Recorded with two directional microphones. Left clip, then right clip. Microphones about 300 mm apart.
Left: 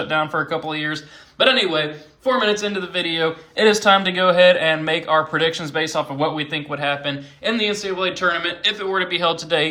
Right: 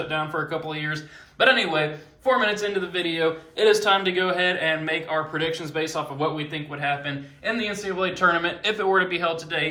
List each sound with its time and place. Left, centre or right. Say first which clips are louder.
0.1 s speech: left 8 dB; left
1.4 s speech: left 3 dB; centre; by 6.6 s left
6.7 s a man's voice: left 3 dB; centre